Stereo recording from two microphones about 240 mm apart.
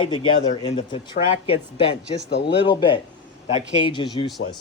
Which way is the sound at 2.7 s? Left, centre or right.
Centre.